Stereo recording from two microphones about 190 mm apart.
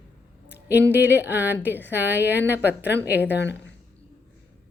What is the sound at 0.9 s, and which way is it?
A woman's voice, 10° right (ahead or behind).